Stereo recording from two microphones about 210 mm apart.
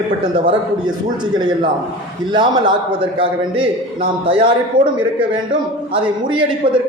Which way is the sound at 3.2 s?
25° right (ahead or behind).